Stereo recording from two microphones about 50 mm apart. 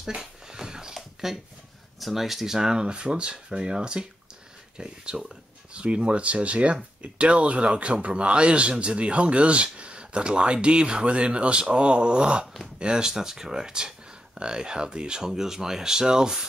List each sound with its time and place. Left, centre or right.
0.1 s dog: centre
0.9 s a sound: centre
2.0 s speech: centre